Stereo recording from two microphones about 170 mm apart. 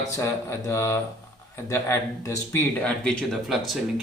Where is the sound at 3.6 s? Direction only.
Centre (ahead or behind).